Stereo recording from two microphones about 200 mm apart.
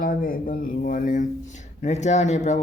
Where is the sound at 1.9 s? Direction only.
35° left (ahead or behind).